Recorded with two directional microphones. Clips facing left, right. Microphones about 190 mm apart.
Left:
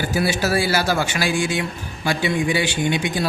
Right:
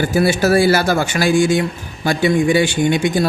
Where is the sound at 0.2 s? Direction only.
50° right (ahead or behind).